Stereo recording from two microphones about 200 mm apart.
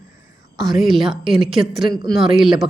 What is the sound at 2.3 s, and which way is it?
Speech, centre (ahead or behind).